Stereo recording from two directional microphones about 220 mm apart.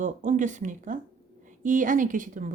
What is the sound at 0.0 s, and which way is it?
A woman's voice, 35° right (ahead or behind).